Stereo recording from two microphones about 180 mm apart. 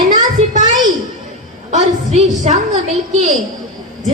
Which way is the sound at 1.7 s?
40° right (ahead or behind).